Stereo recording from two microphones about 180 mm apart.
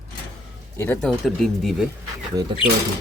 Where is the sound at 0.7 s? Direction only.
10° left (ahead or behind).